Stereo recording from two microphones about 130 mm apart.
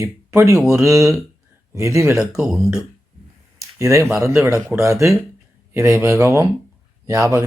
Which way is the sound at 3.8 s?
20° right (ahead or behind).